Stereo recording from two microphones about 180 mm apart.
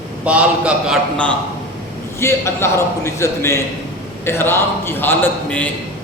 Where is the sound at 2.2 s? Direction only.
15° left (ahead or behind).